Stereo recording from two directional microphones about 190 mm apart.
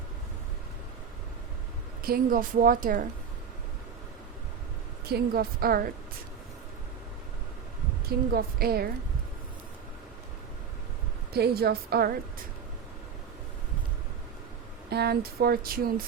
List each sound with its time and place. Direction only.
2.0 s a woman's voice: 50° right (ahead or behind)
5.0 s a woman's voice: 55° right (ahead or behind)
8.0 s a woman's voice: 55° right (ahead or behind)
11.3 s speech: 55° right (ahead or behind)
14.8 s speech: 60° right (ahead or behind)